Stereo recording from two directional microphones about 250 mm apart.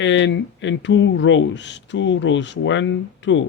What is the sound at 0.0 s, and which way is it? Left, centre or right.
Speech, left.